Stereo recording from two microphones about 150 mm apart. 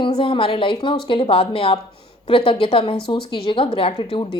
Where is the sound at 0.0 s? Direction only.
35° left (ahead or behind).